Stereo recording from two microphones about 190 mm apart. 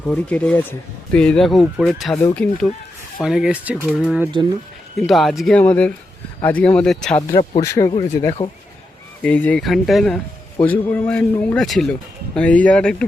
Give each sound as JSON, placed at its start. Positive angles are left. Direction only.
{"t": 0.1, "sound": "a man's voice", "side_deg": 5}
{"t": 7.2, "sound": "a man's voice", "side_deg": 25}
{"t": 9.2, "sound": "a man's voice", "side_deg": 5}